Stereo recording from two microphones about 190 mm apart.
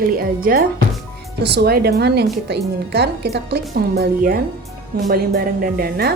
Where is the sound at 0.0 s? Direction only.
50° right (ahead or behind).